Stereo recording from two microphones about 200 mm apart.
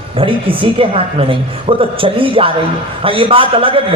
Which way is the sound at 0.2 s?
25° right (ahead or behind).